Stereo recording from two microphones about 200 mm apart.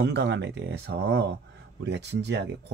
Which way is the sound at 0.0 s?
60° right (ahead or behind).